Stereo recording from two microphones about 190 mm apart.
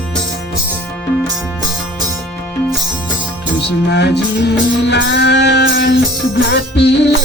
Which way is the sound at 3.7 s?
60° left (ahead or behind).